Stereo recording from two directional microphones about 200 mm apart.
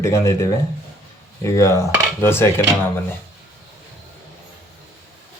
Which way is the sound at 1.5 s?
15° left (ahead or behind).